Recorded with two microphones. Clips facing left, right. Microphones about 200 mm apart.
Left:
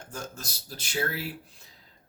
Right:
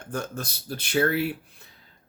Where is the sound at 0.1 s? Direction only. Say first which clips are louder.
Right 9 dB; 60° right (ahead or behind).